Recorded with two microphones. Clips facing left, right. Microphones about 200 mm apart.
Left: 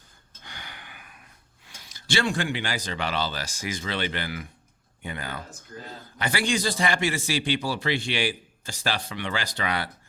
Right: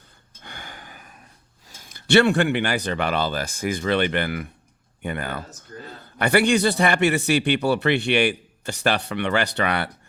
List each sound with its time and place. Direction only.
0.4 s gasp: 50° right (ahead or behind)
1.6 s a man's voice: 45° right (ahead or behind); by 9.9 s 65° right (ahead or behind)